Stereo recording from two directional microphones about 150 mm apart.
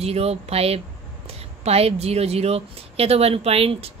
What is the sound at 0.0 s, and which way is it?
Speech, 45° right (ahead or behind).